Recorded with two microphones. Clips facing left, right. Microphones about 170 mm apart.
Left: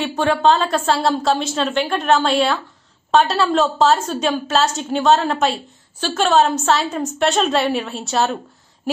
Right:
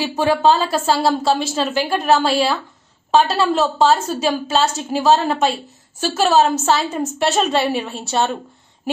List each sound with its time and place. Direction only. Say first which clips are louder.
0.0 s a woman's voice: right 1 dB; 5° right (ahead or behind)